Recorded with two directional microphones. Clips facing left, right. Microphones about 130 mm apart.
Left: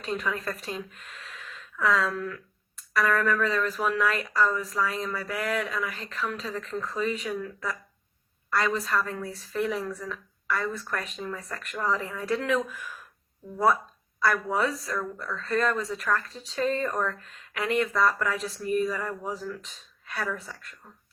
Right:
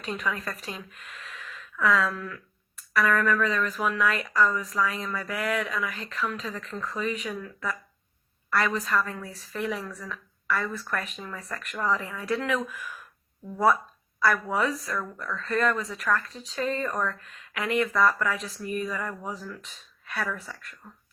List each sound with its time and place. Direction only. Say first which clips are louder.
0.0 s speech: left 1 dB; 35° left (ahead or behind)
14.2 s speech: even; 25° left (ahead or behind)